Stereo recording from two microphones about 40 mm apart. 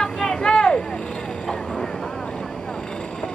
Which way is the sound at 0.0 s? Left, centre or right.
Centre.